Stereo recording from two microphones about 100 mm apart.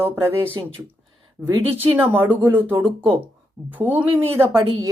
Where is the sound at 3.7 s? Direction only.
15° right (ahead or behind).